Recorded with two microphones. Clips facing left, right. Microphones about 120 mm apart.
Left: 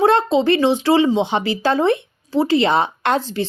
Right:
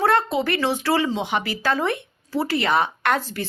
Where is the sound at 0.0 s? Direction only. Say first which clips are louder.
Left 5 dB; 25° left (ahead or behind).